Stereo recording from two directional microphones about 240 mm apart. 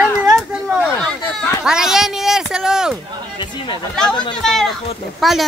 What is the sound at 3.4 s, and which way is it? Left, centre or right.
Speech, centre.